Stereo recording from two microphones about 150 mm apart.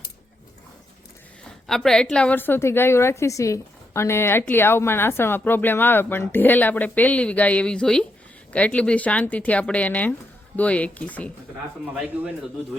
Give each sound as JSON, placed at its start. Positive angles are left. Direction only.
{"t": 1.5, "sound": "a woman's voice", "side_deg": 5}
{"t": 11.9, "sound": "a man's voice", "side_deg": -10}